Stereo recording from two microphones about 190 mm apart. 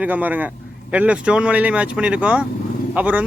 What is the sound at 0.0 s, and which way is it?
A man's voice, 10° right (ahead or behind).